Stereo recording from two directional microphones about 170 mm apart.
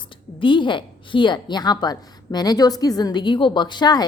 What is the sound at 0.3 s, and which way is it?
A woman's voice, 30° left (ahead or behind).